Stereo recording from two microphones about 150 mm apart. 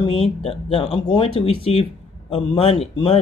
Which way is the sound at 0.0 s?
40° left (ahead or behind).